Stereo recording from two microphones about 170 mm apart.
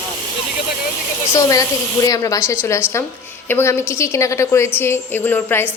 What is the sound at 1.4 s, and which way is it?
A woman's voice, 20° left (ahead or behind).